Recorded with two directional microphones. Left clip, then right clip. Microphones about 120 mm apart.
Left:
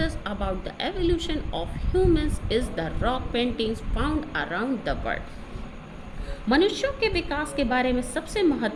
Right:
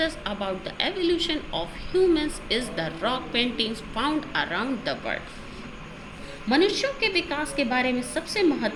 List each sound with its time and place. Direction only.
0.0 s a woman's voice: 50° left (ahead or behind)
6.8 s a woman's voice: 50° left (ahead or behind)